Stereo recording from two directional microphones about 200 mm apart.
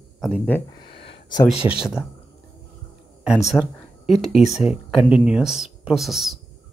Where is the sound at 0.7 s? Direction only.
25° left (ahead or behind).